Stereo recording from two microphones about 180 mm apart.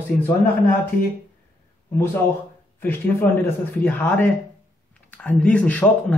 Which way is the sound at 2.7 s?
10° left (ahead or behind).